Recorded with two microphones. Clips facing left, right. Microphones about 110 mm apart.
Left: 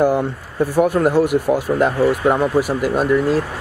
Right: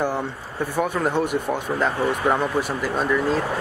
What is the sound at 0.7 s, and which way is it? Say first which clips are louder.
Speech: left 7 dB; 5° left (ahead or behind).